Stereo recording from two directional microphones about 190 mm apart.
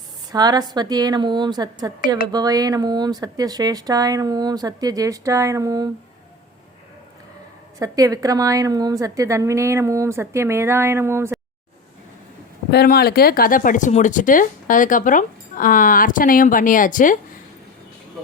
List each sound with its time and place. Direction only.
0.3 s speech: 20° right (ahead or behind)
7.8 s a woman's voice: 20° right (ahead or behind)
12.7 s speech: 55° left (ahead or behind)